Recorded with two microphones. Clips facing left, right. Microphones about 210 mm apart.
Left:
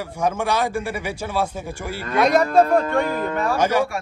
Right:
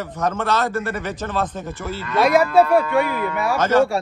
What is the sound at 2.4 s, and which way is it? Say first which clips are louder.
Speech: right 1 dB; 45° left (ahead or behind).